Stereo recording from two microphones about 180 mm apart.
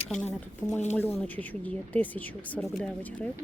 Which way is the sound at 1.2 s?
10° left (ahead or behind).